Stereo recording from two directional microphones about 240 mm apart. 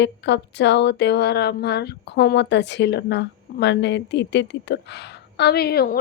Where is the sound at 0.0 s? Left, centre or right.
Left.